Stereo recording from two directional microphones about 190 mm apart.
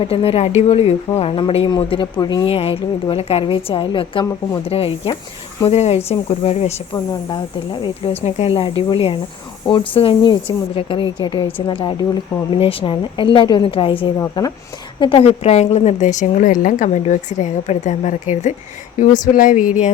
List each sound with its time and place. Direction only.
0.0 s a woman's voice: 30° left (ahead or behind)